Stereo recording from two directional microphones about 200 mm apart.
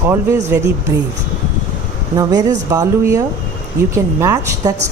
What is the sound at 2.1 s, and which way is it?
Speech, 15° right (ahead or behind).